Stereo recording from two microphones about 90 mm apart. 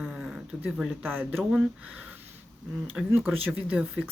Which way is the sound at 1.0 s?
20° right (ahead or behind).